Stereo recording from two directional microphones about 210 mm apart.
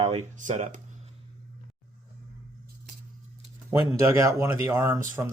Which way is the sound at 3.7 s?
15° right (ahead or behind).